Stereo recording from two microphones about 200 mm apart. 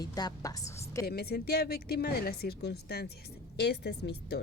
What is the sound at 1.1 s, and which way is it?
Speech, 50° left (ahead or behind).